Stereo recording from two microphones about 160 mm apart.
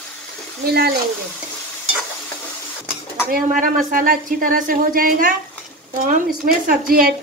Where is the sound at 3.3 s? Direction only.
60° right (ahead or behind).